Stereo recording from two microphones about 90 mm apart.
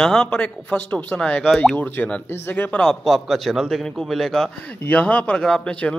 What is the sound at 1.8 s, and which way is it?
A man's voice, 20° left (ahead or behind).